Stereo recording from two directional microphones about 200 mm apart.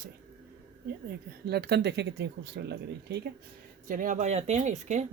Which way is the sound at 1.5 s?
55° right (ahead or behind).